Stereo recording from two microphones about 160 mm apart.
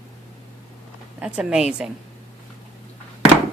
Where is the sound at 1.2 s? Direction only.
5° right (ahead or behind).